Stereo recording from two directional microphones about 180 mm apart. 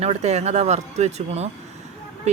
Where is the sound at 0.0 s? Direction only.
35° right (ahead or behind).